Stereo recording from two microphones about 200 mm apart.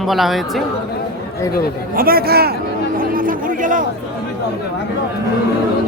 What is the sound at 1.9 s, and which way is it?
Speech, 50° right (ahead or behind).